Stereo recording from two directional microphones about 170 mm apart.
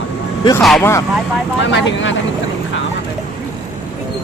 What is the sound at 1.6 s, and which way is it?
Speech, 90° left.